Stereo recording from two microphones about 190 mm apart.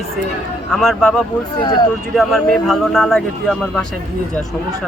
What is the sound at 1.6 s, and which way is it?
Speech, 25° left (ahead or behind).